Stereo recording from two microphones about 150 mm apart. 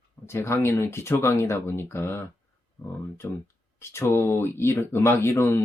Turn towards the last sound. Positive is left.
turn(degrees=15)  # may be behind; listen again after turning